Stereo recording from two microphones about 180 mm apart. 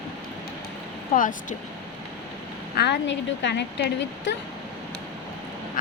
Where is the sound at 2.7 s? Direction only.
70° left (ahead or behind).